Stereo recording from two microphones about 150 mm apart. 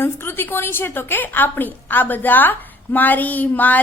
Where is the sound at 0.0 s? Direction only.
15° left (ahead or behind).